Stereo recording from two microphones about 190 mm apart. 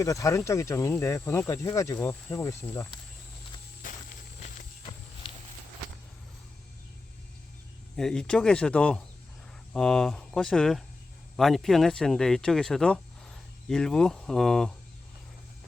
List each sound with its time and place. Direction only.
0.0 s speech: 15° left (ahead or behind)
3.8 s walk: 45° left (ahead or behind)
5.2 s walk: 25° left (ahead or behind)
7.9 s speech: 5° left (ahead or behind)